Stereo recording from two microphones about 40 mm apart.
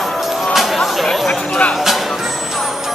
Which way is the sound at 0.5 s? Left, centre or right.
Centre.